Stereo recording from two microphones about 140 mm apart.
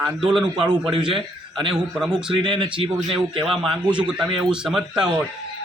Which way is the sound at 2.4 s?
35° right (ahead or behind).